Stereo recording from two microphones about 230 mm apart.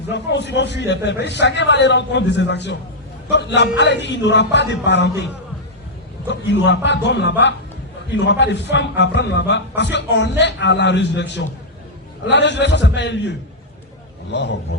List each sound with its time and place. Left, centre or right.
0.1 s speech: left